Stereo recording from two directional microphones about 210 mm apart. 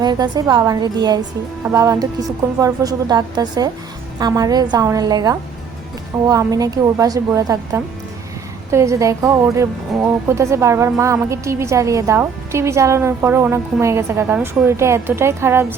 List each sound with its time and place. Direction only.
0.0 s a woman's voice: 20° right (ahead or behind)